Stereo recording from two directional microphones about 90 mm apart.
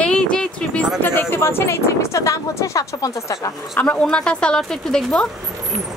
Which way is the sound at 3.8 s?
10° left (ahead or behind).